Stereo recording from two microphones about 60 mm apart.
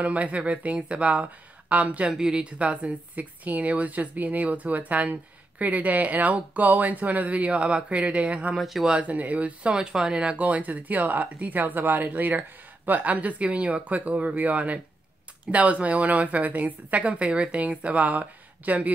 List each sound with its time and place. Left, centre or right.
0.0 s speech: right
2.0 s speech: centre
8.5 s speech: centre
8.9 s speech: right
10.3 s speech: right